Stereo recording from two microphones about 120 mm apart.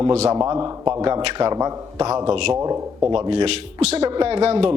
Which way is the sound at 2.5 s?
30° right (ahead or behind).